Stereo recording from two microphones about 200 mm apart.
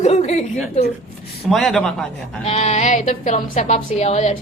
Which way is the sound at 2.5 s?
35° left (ahead or behind).